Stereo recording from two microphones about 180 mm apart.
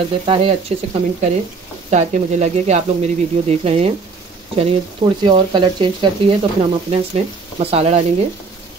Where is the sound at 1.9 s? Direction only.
40° right (ahead or behind).